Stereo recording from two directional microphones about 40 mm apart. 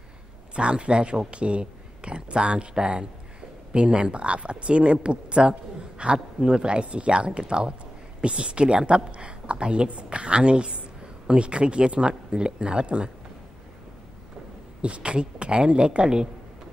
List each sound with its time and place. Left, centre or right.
0.6 s a woman's voice: right
14.8 s speech: right